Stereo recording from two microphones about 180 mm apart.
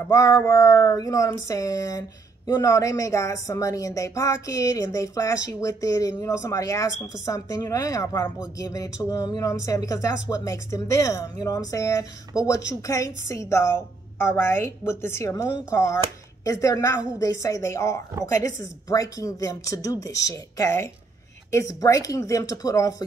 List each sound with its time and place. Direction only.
0.0 s speech: 15° left (ahead or behind)